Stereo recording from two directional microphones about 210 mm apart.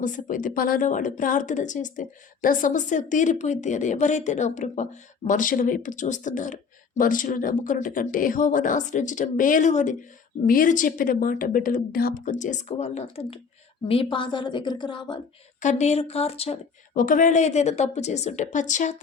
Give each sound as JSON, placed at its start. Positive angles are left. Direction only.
{"t": 0.0, "sound": "a woman's voice", "side_deg": 40}
{"t": 15.6, "sound": "speech", "side_deg": 30}